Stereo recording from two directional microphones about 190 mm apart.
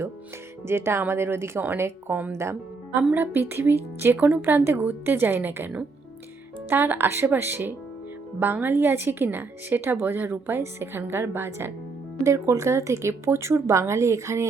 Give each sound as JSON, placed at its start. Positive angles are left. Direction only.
{"t": 0.7, "sound": "a woman's voice", "side_deg": -15}